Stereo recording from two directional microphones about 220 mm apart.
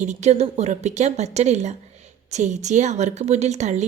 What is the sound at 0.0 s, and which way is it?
Speech, 30° right (ahead or behind).